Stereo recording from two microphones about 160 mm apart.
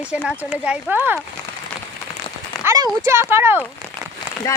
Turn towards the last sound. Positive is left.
turn(degrees=20)  # may be behind; listen again after turning